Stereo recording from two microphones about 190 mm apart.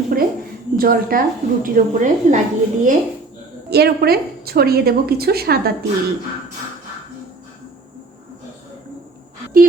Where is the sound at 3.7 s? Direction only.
55° right (ahead or behind).